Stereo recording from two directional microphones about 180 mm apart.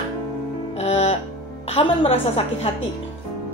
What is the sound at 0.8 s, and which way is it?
Music, 35° left (ahead or behind).